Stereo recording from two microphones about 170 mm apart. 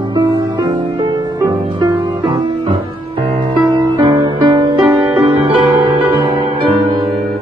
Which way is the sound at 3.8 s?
25° right (ahead or behind).